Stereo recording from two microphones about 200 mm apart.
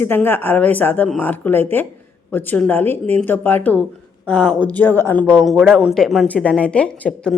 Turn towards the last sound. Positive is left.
turn(degrees=5)  # may be behind; listen again after turning